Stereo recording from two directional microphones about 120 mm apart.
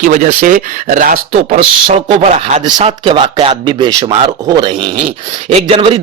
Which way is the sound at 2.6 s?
35° right (ahead or behind).